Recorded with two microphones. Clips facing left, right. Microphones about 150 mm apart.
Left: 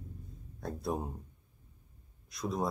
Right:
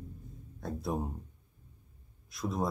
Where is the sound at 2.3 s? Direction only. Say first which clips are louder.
Right 1 dB; centre (ahead or behind).